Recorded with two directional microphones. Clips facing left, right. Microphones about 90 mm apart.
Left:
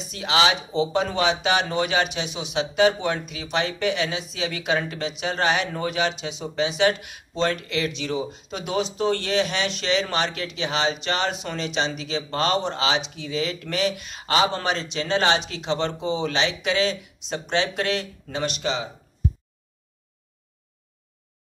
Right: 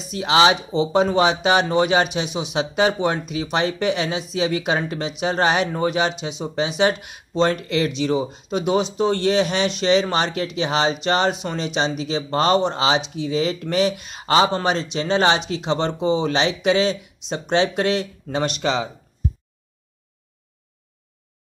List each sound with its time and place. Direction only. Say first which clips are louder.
0.1 s speech: right 5 dB; 30° right (ahead or behind)
18.6 s speech: right 5 dB; 60° right (ahead or behind)